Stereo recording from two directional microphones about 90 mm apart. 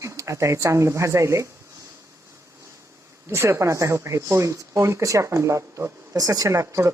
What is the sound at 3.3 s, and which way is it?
Speech, 30° right (ahead or behind).